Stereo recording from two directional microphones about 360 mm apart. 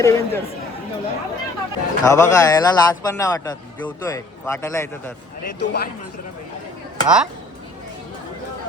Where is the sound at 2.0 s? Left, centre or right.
Centre.